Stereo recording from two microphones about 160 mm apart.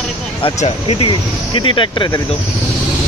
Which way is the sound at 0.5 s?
40° left (ahead or behind).